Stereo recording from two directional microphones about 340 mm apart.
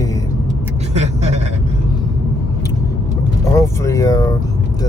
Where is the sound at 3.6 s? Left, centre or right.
Centre.